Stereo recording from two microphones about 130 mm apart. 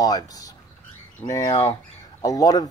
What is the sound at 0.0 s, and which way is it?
Speech, 30° left (ahead or behind).